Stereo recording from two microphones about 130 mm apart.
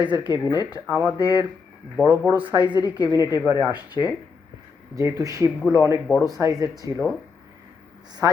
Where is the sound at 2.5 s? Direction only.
35° left (ahead or behind).